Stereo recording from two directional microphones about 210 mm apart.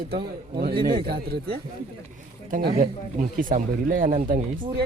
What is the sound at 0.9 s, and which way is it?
Speech, 45° right (ahead or behind).